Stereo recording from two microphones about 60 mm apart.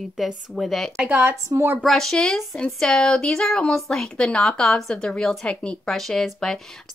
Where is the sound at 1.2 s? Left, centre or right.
Right.